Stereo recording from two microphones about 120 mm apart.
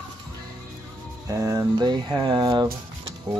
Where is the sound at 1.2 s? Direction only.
30° right (ahead or behind).